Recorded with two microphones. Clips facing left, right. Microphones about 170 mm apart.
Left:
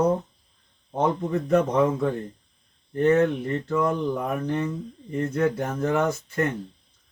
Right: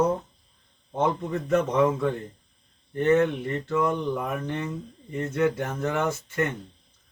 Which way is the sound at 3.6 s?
35° left (ahead or behind).